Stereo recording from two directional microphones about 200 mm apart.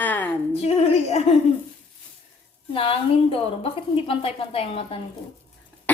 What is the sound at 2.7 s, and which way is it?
A woman's voice, 25° left (ahead or behind).